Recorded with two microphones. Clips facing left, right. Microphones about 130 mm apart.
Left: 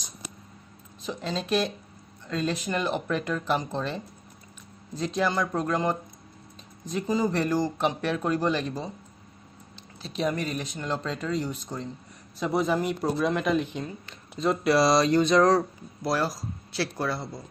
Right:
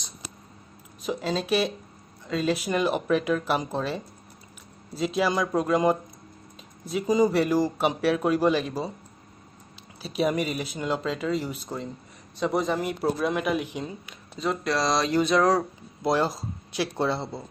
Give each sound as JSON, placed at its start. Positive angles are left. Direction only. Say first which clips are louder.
{"t": 1.0, "sound": "speech", "louder": "right 4 dB", "side_deg": -5}
{"t": 10.0, "sound": "speech", "louder": "right 3 dB", "side_deg": -10}
{"t": 14.4, "sound": "speech", "louder": "left 4 dB", "side_deg": 5}
{"t": 16.0, "sound": "speech", "louder": "right 3 dB", "side_deg": -20}